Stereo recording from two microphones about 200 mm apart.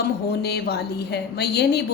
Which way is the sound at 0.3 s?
55° left (ahead or behind).